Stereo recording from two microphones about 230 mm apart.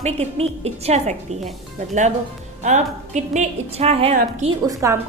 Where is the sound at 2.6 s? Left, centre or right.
Right.